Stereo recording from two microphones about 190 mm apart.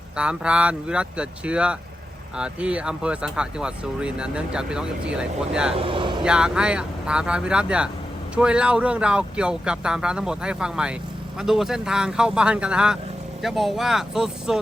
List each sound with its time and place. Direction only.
0.2 s speech: 5° right (ahead or behind)
5.7 s speech: 30° right (ahead or behind)
6.2 s speech: 5° right (ahead or behind)